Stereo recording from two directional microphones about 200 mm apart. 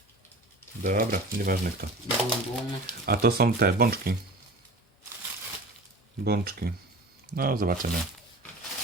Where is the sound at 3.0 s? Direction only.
50° right (ahead or behind).